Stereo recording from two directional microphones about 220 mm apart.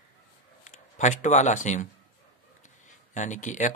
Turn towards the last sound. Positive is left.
turn(degrees=35)  # may be behind; listen again after turning